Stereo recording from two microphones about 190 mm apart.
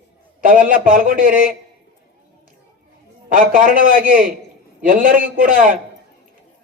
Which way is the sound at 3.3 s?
45° right (ahead or behind).